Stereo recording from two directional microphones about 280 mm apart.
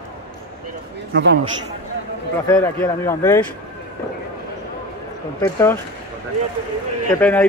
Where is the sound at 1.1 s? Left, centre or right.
Right.